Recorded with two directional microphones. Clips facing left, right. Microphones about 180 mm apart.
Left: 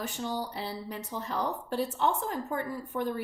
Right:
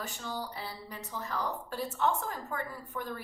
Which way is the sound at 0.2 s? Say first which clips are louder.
Left 6 dB; 25° left (ahead or behind).